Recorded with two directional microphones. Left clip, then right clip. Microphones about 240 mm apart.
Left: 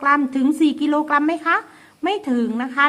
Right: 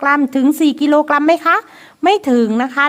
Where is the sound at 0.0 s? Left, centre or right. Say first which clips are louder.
Right 4 dB; right.